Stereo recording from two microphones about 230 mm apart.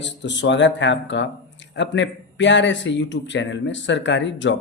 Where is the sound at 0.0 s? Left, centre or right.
Left.